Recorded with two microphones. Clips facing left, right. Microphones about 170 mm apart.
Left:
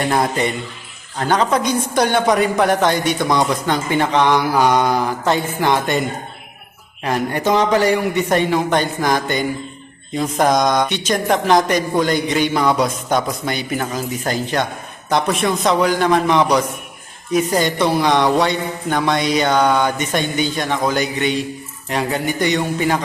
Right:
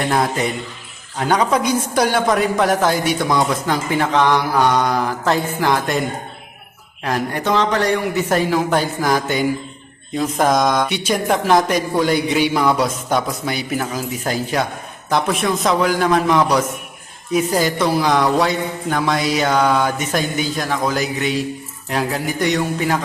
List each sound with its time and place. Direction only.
0.0 s a woman's voice: centre (ahead or behind)